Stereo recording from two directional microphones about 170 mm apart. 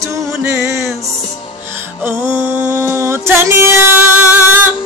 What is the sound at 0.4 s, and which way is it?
Music, 15° right (ahead or behind).